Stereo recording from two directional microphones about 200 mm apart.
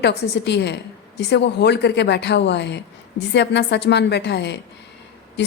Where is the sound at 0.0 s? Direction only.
60° left (ahead or behind).